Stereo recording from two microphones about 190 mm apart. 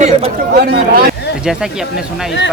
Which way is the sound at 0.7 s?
55° right (ahead or behind).